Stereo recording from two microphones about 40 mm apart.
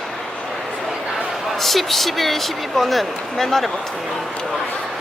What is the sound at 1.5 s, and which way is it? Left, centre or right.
Speech, centre.